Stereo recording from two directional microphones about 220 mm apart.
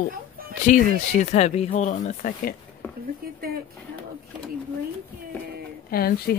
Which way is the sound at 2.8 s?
10° left (ahead or behind).